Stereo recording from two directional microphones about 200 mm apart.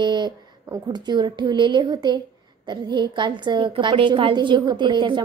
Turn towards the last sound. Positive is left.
turn(degrees=-25)  # may be behind; listen again after turning